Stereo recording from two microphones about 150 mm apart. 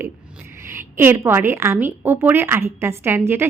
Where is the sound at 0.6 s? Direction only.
15° right (ahead or behind).